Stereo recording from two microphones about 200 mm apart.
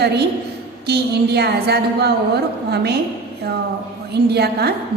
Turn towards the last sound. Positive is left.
turn(degrees=-55)  # may be behind; listen again after turning